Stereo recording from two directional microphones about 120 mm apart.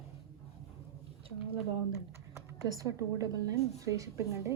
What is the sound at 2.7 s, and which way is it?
A woman's voice, 30° right (ahead or behind).